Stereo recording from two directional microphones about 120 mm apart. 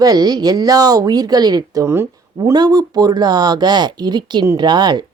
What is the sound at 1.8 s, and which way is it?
A woman's voice, 20° right (ahead or behind).